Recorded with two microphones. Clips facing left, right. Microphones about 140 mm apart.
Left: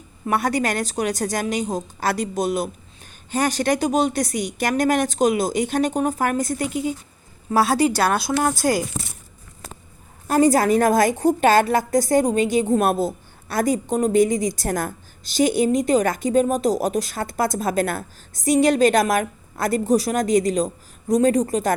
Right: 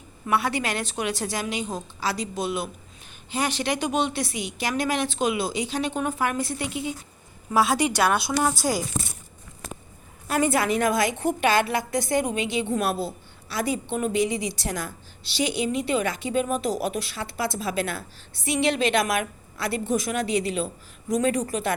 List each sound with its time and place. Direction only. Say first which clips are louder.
0.3 s a woman's voice: left 4 dB; 45° left (ahead or behind)
2.0 s a woman's voice: left 5 dB; 55° left (ahead or behind)
10.2 s a woman's voice: left 6 dB; 40° left (ahead or behind)